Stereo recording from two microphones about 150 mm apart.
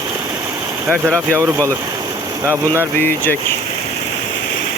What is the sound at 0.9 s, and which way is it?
Speech, 15° right (ahead or behind).